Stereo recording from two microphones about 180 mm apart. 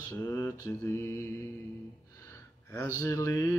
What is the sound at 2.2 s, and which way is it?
Gasp, 10° left (ahead or behind).